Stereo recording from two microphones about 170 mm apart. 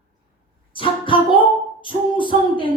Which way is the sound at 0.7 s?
30° left (ahead or behind).